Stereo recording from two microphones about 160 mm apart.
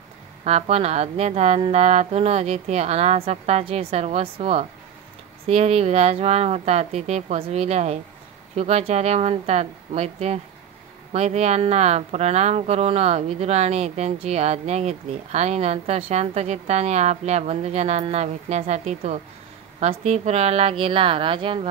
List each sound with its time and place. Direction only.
0.4 s speech: 40° right (ahead or behind)